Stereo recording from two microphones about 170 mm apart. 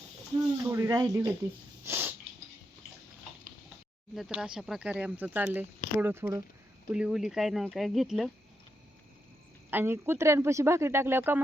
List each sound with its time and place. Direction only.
0.6 s speech: 15° right (ahead or behind)
1.8 s a sound: 15° right (ahead or behind)
4.1 s speech: 5° right (ahead or behind)
9.6 s speech: 15° right (ahead or behind)